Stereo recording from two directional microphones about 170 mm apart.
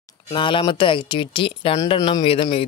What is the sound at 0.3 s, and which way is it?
A woman's voice, 30° left (ahead or behind).